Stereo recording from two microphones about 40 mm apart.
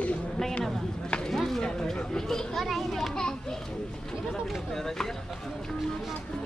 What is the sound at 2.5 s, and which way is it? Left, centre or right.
Speech, centre.